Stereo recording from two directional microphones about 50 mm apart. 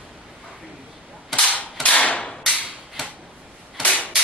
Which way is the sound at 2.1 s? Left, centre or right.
Left.